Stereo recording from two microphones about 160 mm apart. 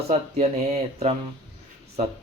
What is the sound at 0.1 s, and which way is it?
Speech, 40° right (ahead or behind).